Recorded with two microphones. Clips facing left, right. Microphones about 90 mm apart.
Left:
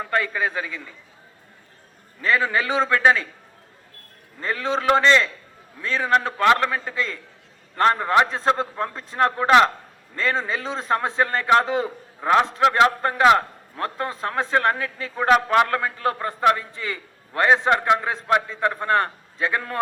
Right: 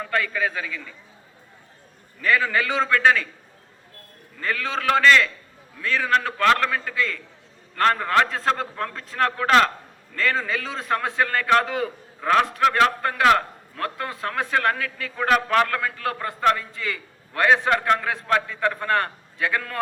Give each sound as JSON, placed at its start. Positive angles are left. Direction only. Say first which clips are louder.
{"t": 0.0, "sound": "a man's voice", "louder": "left 1 dB", "side_deg": 25}
{"t": 2.2, "sound": "a man's voice", "louder": "even", "side_deg": 25}
{"t": 4.4, "sound": "a man's voice", "louder": "left 2 dB", "side_deg": 25}